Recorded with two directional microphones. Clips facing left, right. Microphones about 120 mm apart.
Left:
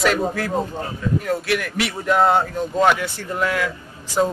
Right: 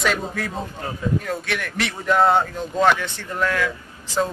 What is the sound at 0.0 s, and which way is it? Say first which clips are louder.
A man's voice: left 4 dB; centre (ahead or behind).